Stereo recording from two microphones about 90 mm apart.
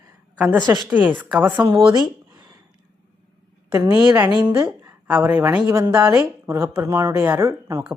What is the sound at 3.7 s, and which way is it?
Speech, 25° right (ahead or behind).